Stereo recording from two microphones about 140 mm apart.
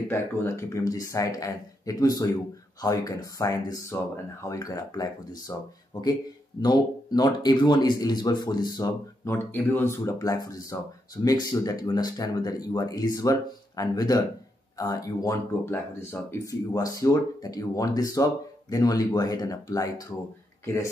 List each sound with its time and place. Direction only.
0.1 s speech: 20° left (ahead or behind)
9.3 s speech: 15° left (ahead or behind)